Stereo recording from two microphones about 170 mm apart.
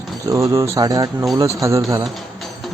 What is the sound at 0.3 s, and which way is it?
Speech, 20° right (ahead or behind).